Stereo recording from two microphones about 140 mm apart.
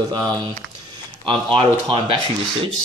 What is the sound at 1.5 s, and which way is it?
Speech, 35° right (ahead or behind).